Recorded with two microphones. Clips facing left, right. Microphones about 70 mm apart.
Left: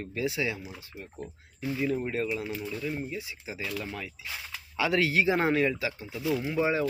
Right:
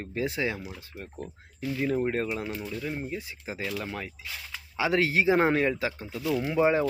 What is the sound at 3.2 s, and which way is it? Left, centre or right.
Speech, right.